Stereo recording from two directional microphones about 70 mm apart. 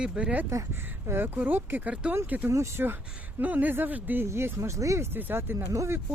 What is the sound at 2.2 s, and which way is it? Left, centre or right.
Speech, right.